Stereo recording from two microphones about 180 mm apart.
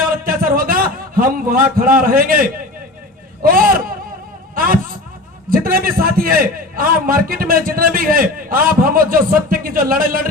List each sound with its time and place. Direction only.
0.3 s a sound: 50° right (ahead or behind)
2.0 s a man's voice: 50° right (ahead or behind)
5.5 s a man's voice: 55° right (ahead or behind)